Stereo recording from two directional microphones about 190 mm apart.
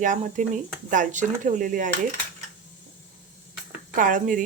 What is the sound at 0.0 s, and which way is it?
Speech, 40° right (ahead or behind).